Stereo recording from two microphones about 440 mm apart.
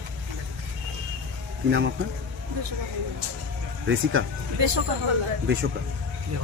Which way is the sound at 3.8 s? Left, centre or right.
Right.